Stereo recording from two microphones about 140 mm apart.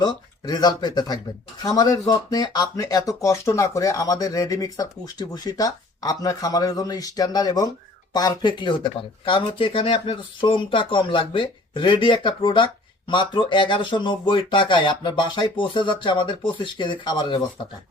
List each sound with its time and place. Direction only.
0.0 s speech: 30° left (ahead or behind)